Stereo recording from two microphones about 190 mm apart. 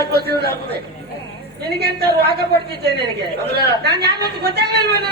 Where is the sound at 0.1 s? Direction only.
55° right (ahead or behind).